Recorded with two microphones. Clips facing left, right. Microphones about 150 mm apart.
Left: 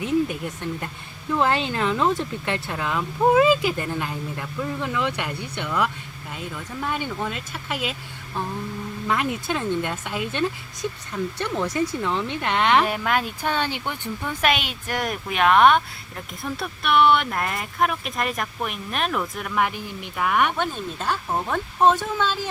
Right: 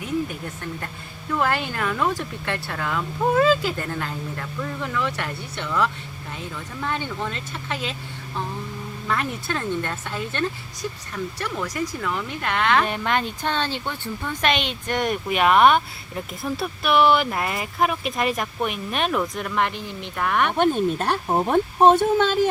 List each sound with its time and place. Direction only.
0.0 s speech: 20° left (ahead or behind)
9.0 s speech: 15° left (ahead or behind)
12.8 s speech: 5° left (ahead or behind)
20.6 s speech: 60° right (ahead or behind)
21.2 s speech: 35° right (ahead or behind)
21.9 s speech: 50° right (ahead or behind)